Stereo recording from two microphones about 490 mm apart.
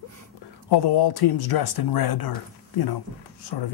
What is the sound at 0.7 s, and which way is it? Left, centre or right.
Speech, left.